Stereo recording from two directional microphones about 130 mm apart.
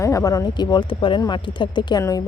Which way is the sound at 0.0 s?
25° left (ahead or behind).